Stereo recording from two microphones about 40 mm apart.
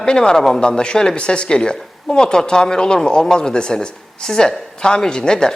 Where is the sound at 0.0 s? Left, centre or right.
Centre.